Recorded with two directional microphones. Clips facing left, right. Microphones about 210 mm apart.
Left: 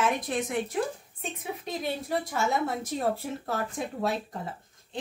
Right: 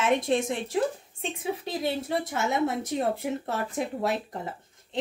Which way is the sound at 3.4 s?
25° right (ahead or behind).